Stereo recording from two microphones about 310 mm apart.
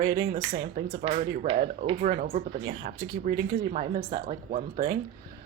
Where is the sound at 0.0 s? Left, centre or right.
Right.